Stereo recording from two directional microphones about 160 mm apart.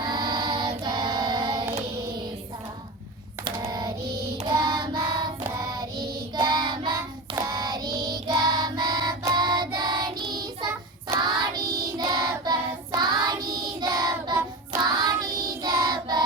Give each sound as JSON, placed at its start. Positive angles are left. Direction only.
{"t": 0.0, "sound": "child singing", "side_deg": -25}
{"t": 3.4, "sound": "typing", "side_deg": -25}
{"t": 4.5, "sound": "child singing", "side_deg": -20}